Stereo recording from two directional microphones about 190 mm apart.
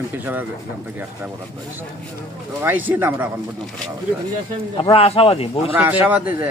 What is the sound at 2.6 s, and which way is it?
Speech, 10° right (ahead or behind).